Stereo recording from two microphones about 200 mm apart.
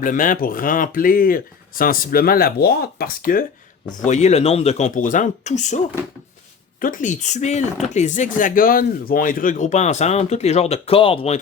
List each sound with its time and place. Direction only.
0.0 s speech: 40° left (ahead or behind)
4.0 s speech: 35° left (ahead or behind)